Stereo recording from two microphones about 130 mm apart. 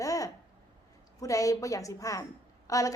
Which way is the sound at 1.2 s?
25° left (ahead or behind).